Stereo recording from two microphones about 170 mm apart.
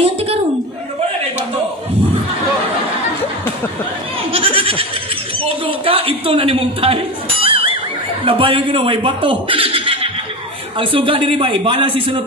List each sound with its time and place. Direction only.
0.0 s a sound: 35° right (ahead or behind)
4.3 s goat: 35° right (ahead or behind)
5.4 s a man's voice: 35° right (ahead or behind)
7.4 s neigh: 35° right (ahead or behind)
8.3 s a man's voice: 30° right (ahead or behind)